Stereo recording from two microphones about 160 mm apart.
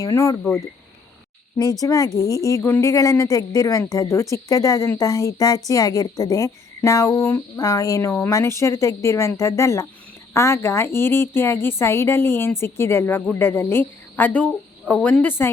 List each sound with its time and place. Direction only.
0.0 s speech: 20° left (ahead or behind)
1.8 s a woman's voice: 20° left (ahead or behind)